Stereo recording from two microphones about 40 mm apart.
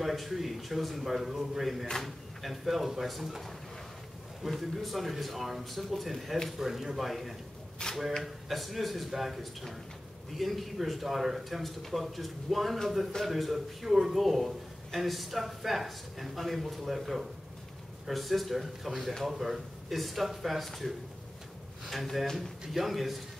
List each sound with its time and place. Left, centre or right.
0.0 s speech: centre
6.6 s speech: centre
7.8 s a sound: left
8.2 s speech: centre